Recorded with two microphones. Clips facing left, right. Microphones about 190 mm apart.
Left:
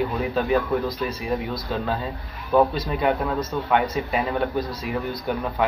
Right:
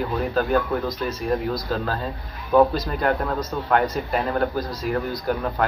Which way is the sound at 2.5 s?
Centre (ahead or behind).